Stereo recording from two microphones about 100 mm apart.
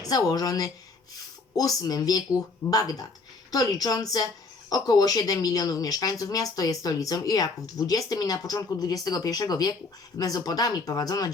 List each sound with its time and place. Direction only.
0.0 s speech: 40° left (ahead or behind)